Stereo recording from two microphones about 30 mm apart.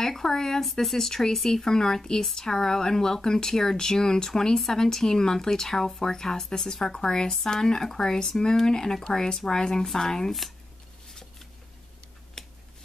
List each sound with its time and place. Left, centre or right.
0.0 s speech: centre
0.7 s speech: centre
0.9 s speech: centre
11.1 s a sound: centre
12.4 s finger snapping: left